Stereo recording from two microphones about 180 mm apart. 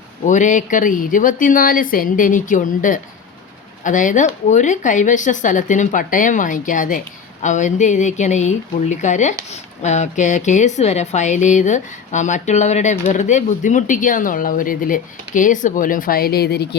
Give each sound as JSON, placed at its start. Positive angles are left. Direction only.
{"t": 0.3, "sound": "speech", "side_deg": 45}